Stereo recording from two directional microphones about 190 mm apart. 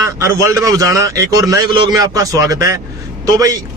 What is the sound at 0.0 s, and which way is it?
A man's voice, 15° right (ahead or behind).